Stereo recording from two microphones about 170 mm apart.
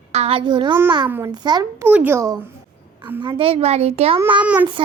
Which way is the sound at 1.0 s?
10° right (ahead or behind).